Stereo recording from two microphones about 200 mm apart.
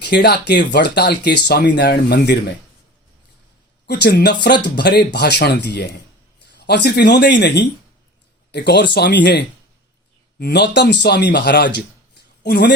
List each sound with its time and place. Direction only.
0.0 s speech: 55° left (ahead or behind)
3.8 s speech: 55° left (ahead or behind)